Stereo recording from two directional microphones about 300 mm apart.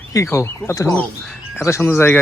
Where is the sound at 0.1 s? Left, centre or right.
Centre.